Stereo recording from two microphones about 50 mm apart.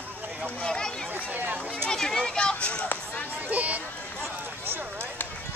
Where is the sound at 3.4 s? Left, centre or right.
Right.